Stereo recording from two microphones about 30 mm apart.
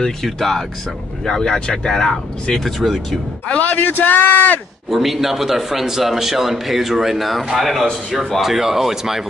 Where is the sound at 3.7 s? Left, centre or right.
Left.